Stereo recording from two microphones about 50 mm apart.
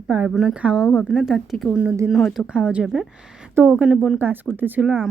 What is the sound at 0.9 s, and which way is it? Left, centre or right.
Speech, centre.